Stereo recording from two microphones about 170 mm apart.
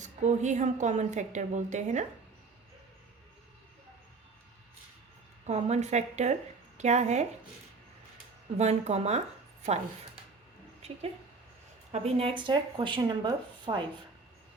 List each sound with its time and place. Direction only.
0.0 s a woman's voice: 45° right (ahead or behind)
5.5 s a woman's voice: 40° right (ahead or behind)
8.5 s a woman's voice: 40° right (ahead or behind)
11.9 s speech: 35° right (ahead or behind)